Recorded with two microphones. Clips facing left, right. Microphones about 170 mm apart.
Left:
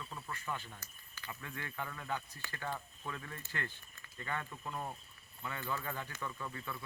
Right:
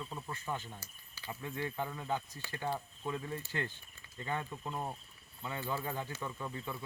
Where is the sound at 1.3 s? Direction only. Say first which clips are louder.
Right 7 dB; 25° right (ahead or behind).